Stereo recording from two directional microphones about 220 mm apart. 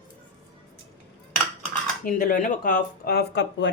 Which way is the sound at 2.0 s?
40° left (ahead or behind).